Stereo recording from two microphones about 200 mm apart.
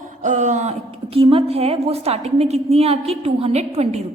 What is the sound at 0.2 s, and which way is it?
A woman's voice, 35° right (ahead or behind).